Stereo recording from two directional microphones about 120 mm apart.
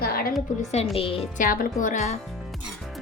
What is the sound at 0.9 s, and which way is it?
Speech, 50° left (ahead or behind).